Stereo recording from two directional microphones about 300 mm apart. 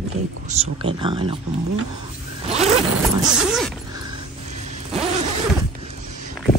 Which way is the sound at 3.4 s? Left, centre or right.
Centre.